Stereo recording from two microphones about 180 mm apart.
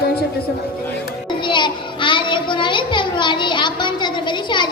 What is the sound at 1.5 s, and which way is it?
Child singing, 25° left (ahead or behind).